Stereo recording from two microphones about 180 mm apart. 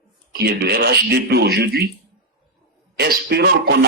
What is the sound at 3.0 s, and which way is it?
Speech, 65° right (ahead or behind).